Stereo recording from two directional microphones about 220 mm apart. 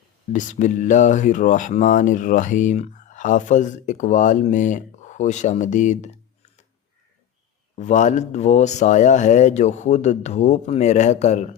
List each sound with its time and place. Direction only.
0.3 s speech: 35° left (ahead or behind)
7.8 s speech: 35° left (ahead or behind)